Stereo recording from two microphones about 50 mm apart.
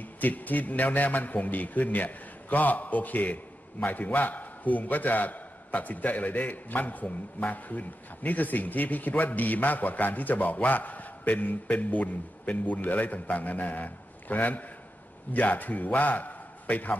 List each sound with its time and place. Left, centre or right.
0.0 s a man's voice: left